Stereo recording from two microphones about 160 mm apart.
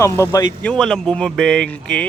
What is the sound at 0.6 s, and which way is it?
Speech, 5° left (ahead or behind).